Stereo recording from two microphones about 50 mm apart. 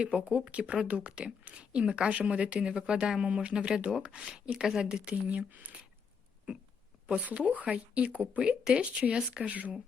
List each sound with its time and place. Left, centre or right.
0.0 s speech: right
5.1 s speech: right
7.1 s speech: right
9.5 s speech: right